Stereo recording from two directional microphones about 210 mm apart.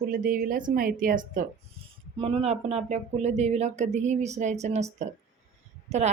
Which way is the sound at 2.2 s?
30° right (ahead or behind).